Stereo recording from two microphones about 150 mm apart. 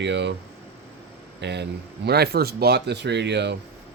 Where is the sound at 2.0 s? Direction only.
90° right.